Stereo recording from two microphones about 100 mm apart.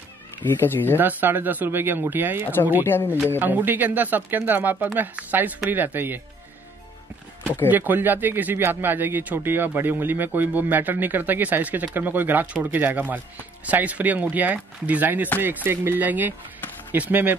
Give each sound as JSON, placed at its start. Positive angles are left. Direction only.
{"t": 0.4, "sound": "speech", "side_deg": 20}
{"t": 0.9, "sound": "speech", "side_deg": -20}
{"t": 2.8, "sound": "speech", "side_deg": 25}
{"t": 3.3, "sound": "speech", "side_deg": -20}
{"t": 7.7, "sound": "speech", "side_deg": -20}